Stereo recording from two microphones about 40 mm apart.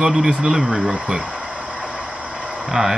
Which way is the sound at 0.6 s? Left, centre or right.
Right.